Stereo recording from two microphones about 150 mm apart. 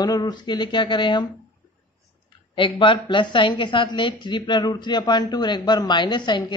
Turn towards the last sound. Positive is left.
turn(degrees=30)  # may be behind; listen again after turning